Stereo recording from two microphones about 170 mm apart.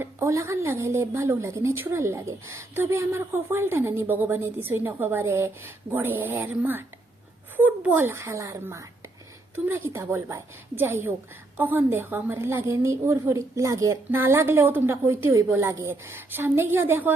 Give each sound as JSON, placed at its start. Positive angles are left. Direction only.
{"t": 0.0, "sound": "a woman's voice", "side_deg": -15}